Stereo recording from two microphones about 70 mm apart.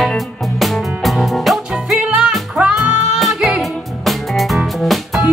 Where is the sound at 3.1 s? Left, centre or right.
Centre.